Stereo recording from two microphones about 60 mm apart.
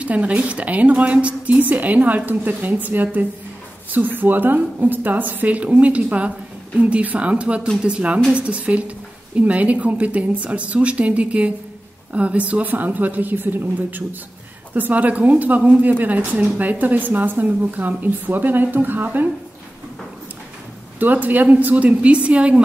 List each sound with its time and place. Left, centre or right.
0.0 s a woman's voice: right
21.0 s a woman's voice: right